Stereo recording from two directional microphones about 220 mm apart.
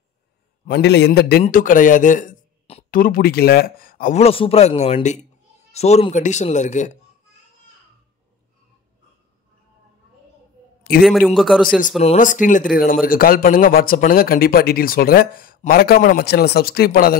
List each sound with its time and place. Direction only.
0.7 s a man's voice: 50° left (ahead or behind)
1.4 s a man's voice: 35° left (ahead or behind)
11.0 s a man's voice: centre (ahead or behind)
12.0 s a man's voice: 30° left (ahead or behind)